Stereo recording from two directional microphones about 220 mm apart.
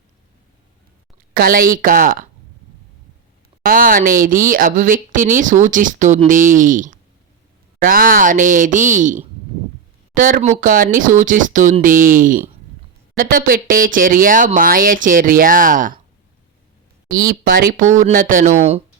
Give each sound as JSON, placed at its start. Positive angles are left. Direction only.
{"t": 1.3, "sound": "speech", "side_deg": -40}
{"t": 3.6, "sound": "speech", "side_deg": -40}
{"t": 17.5, "sound": "speech", "side_deg": -40}